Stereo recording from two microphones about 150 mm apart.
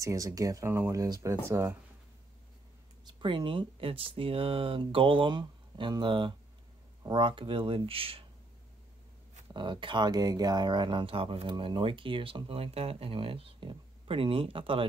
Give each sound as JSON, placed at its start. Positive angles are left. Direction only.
{"t": 0.0, "sound": "speech", "side_deg": -20}
{"t": 3.1, "sound": "speech", "side_deg": -35}
{"t": 9.5, "sound": "speech", "side_deg": -30}